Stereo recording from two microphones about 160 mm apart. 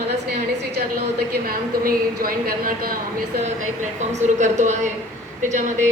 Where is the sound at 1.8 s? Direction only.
65° right (ahead or behind).